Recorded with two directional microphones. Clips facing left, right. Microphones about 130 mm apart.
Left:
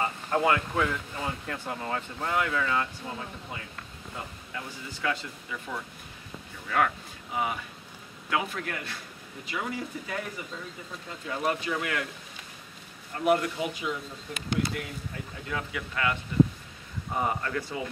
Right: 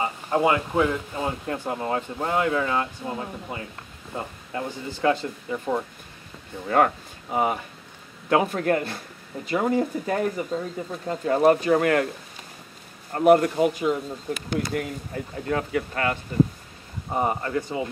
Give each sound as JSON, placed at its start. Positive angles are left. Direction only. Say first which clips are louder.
{"t": 0.0, "sound": "speech", "louder": "right 4 dB", "side_deg": -15}
{"t": 13.1, "sound": "speech", "louder": "right 8 dB", "side_deg": -50}
{"t": 17.1, "sound": "speech", "louder": "right 5 dB", "side_deg": -30}